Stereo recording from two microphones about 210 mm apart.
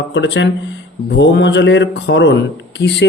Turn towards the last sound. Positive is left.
turn(degrees=55)  # may be behind; listen again after turning